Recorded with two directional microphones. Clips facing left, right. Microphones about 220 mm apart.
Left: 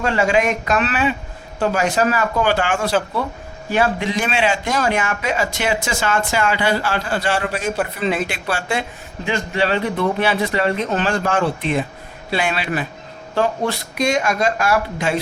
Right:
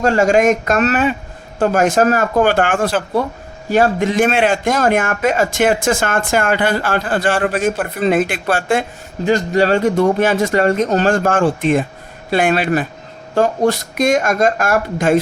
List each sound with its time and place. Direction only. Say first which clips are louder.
0.0 s speech: right 5 dB; 45° right (ahead or behind)
9.2 s speech: right 7 dB; 40° right (ahead or behind)